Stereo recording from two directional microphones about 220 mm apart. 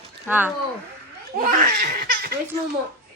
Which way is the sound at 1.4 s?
40° right (ahead or behind).